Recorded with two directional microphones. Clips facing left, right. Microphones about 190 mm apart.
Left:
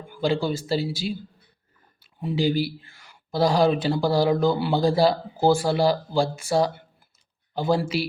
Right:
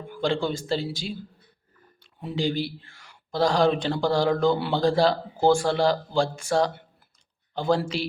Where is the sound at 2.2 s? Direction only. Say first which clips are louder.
Left 4 dB; 5° left (ahead or behind).